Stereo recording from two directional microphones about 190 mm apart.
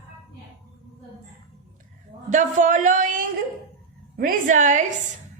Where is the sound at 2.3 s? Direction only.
40° right (ahead or behind).